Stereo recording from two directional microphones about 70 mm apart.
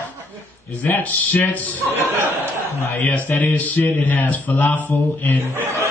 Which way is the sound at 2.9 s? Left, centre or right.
Left.